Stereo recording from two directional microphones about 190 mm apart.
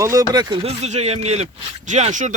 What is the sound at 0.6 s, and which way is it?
Speech, 35° right (ahead or behind).